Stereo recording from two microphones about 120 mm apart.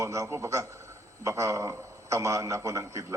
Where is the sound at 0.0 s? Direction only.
25° right (ahead or behind).